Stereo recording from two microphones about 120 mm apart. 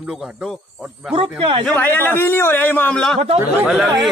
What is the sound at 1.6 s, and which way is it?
A man's voice, 15° left (ahead or behind).